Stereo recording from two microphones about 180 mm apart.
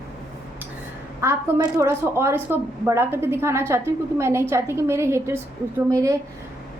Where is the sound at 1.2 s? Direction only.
15° right (ahead or behind).